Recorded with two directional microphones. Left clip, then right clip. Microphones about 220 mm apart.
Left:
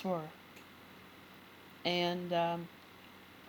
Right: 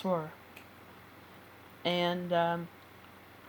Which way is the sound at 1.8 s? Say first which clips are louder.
Right 3 dB; 10° right (ahead or behind).